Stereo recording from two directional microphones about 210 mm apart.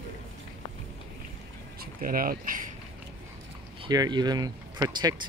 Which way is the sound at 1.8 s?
40° right (ahead or behind).